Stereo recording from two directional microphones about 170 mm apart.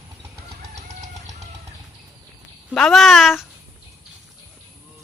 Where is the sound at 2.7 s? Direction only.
Centre (ahead or behind).